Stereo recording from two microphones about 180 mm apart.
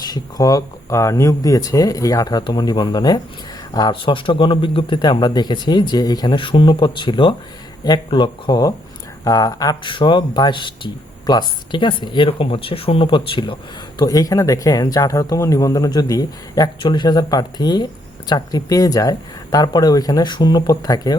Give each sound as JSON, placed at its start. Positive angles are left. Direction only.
{"t": 0.0, "sound": "speech", "side_deg": 20}